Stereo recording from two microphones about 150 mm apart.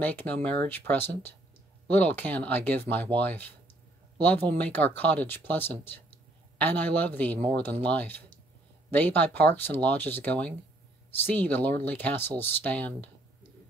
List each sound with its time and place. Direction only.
0.0 s speech: 10° left (ahead or behind)